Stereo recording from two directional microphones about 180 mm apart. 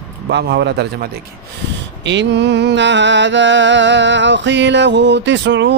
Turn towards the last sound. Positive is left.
turn(degrees=-75)  # may be behind; listen again after turning